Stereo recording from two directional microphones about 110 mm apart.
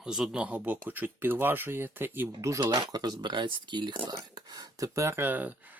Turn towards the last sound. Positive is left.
turn(degrees=-15)  # may be behind; listen again after turning